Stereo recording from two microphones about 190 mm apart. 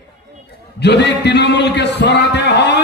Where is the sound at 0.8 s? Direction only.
65° left (ahead or behind).